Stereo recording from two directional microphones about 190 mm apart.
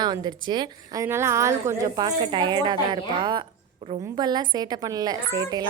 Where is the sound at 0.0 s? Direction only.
20° right (ahead or behind).